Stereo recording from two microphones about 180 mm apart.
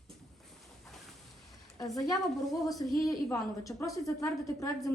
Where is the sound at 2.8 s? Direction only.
20° left (ahead or behind).